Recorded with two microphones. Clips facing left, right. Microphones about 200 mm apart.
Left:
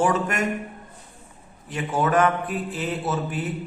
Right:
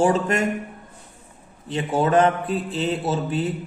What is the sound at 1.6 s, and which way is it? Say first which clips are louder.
A man's voice: right 3 dB; 30° right (ahead or behind).